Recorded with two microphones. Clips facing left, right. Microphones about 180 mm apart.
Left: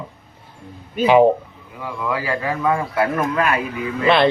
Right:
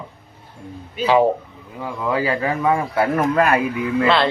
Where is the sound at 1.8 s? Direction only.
25° right (ahead or behind).